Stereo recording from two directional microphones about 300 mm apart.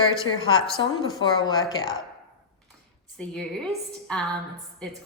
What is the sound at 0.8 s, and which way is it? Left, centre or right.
A woman's voice, centre.